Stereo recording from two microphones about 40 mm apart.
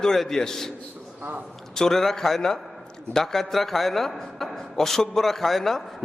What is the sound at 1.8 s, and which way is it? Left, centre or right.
A man's voice, centre.